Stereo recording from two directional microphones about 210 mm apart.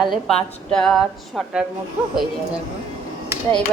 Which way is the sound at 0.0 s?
Centre (ahead or behind).